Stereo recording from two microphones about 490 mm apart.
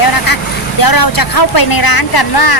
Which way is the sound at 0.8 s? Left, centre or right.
Left.